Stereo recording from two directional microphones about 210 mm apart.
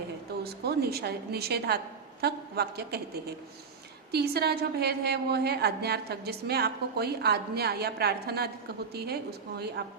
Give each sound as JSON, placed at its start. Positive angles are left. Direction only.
{"t": 0.4, "sound": "a woman's voice", "side_deg": -50}
{"t": 9.6, "sound": "a woman's voice", "side_deg": -50}